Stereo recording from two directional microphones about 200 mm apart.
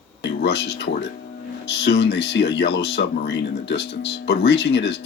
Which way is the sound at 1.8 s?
55° left (ahead or behind).